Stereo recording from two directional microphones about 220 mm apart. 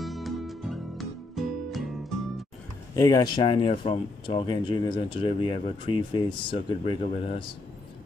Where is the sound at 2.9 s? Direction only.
15° left (ahead or behind).